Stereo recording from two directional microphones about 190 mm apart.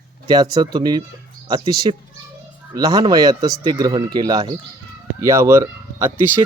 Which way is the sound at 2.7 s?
20° right (ahead or behind).